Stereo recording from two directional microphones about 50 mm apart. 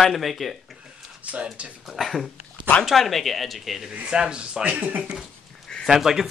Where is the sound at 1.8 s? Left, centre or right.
Centre.